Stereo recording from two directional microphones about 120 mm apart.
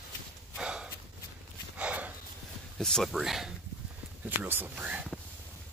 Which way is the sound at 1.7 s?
10° right (ahead or behind).